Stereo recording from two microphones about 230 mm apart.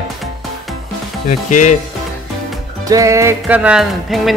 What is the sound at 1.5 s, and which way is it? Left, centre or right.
Speech, left.